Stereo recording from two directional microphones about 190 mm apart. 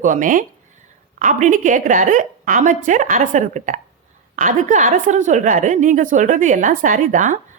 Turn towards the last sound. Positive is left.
turn(degrees=-40)  # may be behind; listen again after turning